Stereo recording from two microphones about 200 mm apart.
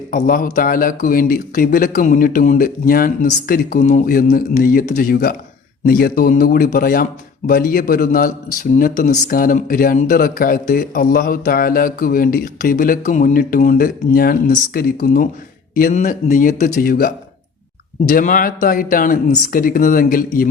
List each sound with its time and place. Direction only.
0.1 s speech: 40° left (ahead or behind)
18.1 s speech: 40° left (ahead or behind)